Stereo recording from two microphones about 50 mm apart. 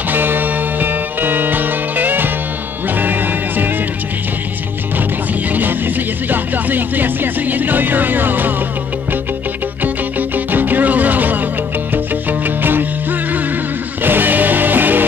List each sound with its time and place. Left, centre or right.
0.1 s music: right
5.5 s a sound: right
6.3 s music: right
10.3 s music: right
14.0 s music: right